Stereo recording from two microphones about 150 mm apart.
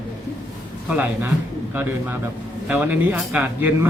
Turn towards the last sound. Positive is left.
turn(degrees=-10)  # may be behind; listen again after turning